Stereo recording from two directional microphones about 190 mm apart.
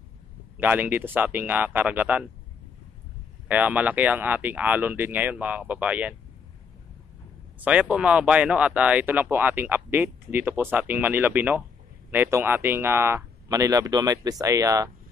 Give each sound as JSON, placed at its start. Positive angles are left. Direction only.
{"t": 0.6, "sound": "speech", "side_deg": -10}
{"t": 3.4, "sound": "speech", "side_deg": -10}
{"t": 7.6, "sound": "speech", "side_deg": -5}